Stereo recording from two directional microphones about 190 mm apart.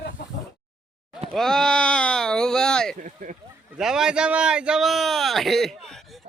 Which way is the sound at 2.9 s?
40° right (ahead or behind).